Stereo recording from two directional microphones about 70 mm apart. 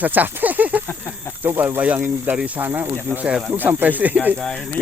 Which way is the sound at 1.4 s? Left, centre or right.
Right.